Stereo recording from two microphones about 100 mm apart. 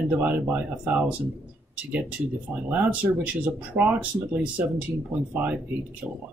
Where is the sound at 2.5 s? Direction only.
15° right (ahead or behind).